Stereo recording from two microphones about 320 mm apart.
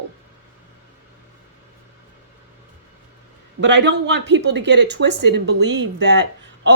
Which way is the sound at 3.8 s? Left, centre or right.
Right.